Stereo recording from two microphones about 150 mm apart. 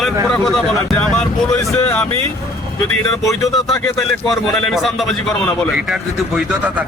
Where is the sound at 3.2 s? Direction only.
20° left (ahead or behind).